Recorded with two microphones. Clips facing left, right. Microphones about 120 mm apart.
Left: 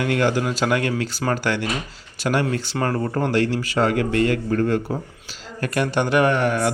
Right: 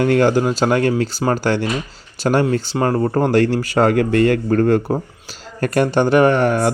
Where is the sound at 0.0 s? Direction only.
40° right (ahead or behind).